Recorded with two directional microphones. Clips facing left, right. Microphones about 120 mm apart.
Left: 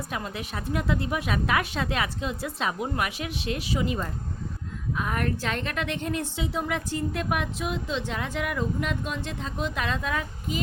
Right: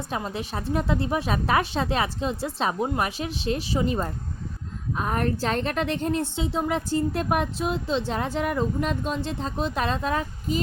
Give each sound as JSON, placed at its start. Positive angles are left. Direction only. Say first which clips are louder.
{"t": 0.3, "sound": "a woman's voice", "louder": "right 3 dB", "side_deg": -30}